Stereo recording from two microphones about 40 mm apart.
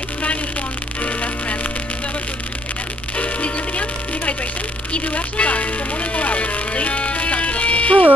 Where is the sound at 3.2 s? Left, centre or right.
Left.